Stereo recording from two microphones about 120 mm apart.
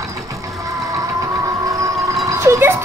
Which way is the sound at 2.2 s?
25° right (ahead or behind).